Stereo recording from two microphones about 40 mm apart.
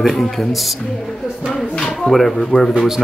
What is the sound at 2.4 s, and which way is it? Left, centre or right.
Speech, left.